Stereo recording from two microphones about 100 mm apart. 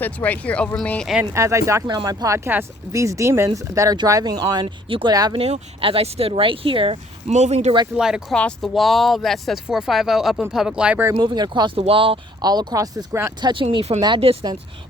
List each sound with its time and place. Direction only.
0.0 s speech: 15° left (ahead or behind)
1.2 s speech: 30° right (ahead or behind)
4.9 s speech: 60° right (ahead or behind)
7.3 s speech: 90° right
7.9 s speech: 5° right (ahead or behind)
8.3 s speech: 10° left (ahead or behind); by 11.0 s 10° right (ahead or behind)
11.2 s speech: 45° right (ahead or behind); by 12.2 s 65° right (ahead or behind)
12.4 s speech: 40° right (ahead or behind)
13.4 s speech: 55° right (ahead or behind)
13.7 s speech: 90° right